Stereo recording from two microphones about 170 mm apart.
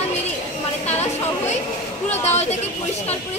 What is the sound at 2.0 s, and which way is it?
Speech, 40° left (ahead or behind).